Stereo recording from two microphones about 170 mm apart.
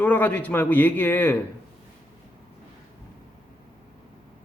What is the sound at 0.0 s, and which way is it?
A man's voice, 10° left (ahead or behind).